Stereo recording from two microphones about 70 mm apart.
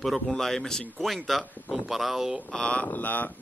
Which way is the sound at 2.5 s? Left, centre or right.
Centre.